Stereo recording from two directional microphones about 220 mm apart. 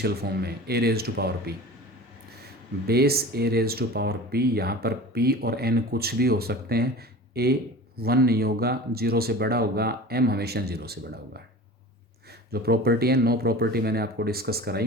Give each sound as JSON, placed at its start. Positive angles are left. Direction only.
{"t": 0.0, "sound": "speech", "side_deg": -45}
{"t": 2.8, "sound": "speech", "side_deg": -45}
{"t": 12.5, "sound": "speech", "side_deg": -45}